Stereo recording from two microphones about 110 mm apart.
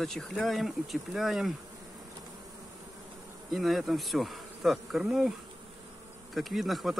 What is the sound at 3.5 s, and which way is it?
Speech, centre (ahead or behind).